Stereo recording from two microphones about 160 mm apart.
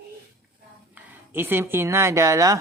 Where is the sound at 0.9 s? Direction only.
15° right (ahead or behind).